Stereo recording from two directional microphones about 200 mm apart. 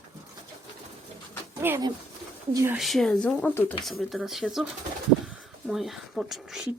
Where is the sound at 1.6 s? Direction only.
10° right (ahead or behind).